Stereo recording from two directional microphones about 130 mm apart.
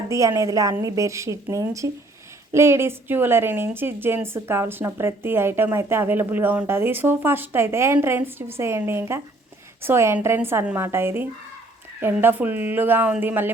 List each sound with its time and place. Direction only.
0.1 s a woman's voice: 25° right (ahead or behind)